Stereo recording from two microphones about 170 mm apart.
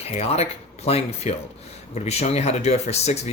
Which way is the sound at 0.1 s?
40° left (ahead or behind).